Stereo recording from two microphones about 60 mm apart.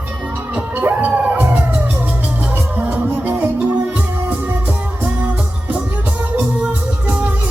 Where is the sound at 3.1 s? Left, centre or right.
Right.